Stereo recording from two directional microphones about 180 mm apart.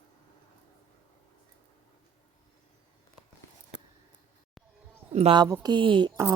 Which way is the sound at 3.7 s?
80° right.